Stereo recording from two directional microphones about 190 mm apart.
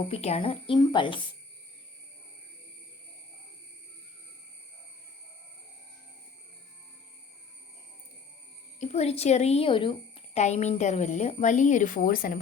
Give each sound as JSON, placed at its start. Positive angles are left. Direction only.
{"t": 0.1, "sound": "speech", "side_deg": 35}
{"t": 8.8, "sound": "speech", "side_deg": 35}